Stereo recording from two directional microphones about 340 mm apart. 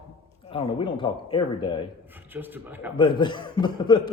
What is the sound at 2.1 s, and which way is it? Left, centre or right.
Speech, centre.